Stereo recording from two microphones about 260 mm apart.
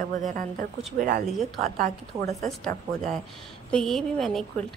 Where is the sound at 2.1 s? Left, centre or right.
Centre.